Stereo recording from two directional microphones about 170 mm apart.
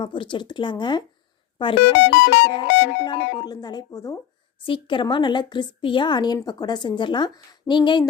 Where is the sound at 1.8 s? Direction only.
90° left.